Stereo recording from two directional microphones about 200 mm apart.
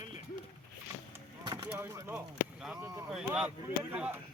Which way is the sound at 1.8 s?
15° right (ahead or behind).